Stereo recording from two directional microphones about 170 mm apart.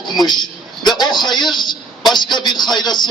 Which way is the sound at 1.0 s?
25° left (ahead or behind).